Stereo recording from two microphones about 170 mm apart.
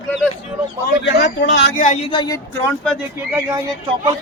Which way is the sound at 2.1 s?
30° left (ahead or behind).